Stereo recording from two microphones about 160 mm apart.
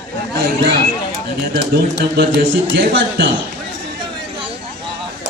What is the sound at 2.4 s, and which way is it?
Speech, 60° right (ahead or behind).